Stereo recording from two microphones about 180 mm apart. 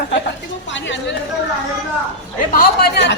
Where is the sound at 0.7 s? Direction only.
90° left.